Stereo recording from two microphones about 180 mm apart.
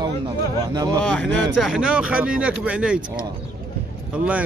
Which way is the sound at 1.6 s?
5° right (ahead or behind).